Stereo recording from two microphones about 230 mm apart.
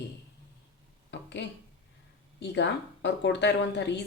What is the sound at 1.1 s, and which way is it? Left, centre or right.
Speech, left.